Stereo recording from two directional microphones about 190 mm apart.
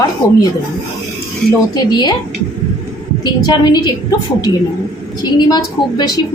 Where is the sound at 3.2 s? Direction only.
20° left (ahead or behind).